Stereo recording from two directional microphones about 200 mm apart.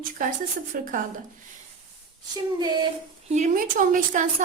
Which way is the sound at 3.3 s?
40° right (ahead or behind).